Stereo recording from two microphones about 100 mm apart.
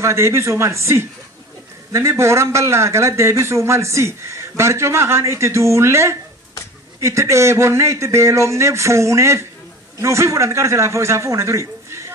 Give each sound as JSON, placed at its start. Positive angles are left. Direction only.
{"t": 0.0, "sound": "a man's voice", "side_deg": -30}